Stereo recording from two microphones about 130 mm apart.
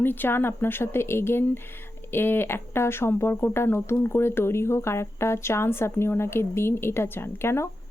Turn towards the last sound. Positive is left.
turn(degrees=20)  # may be behind; listen again after turning